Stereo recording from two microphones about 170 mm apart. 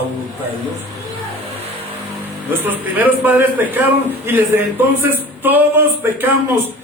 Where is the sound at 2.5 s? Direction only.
10° right (ahead or behind).